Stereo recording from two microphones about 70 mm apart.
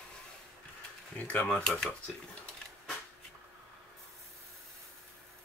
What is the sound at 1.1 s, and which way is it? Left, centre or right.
Speech, left.